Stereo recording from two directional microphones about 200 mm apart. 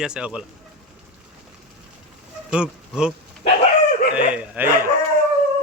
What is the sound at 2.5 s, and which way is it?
Speech, 5° right (ahead or behind).